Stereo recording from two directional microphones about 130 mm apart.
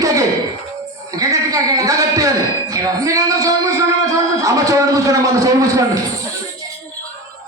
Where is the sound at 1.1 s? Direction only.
25° right (ahead or behind).